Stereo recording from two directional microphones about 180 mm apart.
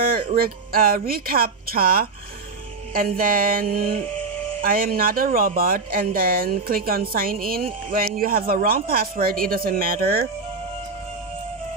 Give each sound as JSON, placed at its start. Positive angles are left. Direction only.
{"t": 0.0, "sound": "speech", "side_deg": -50}